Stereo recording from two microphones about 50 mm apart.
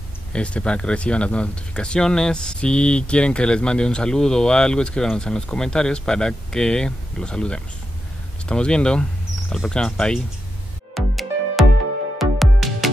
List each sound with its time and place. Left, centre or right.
0.3 s speech: left
11.0 s music: centre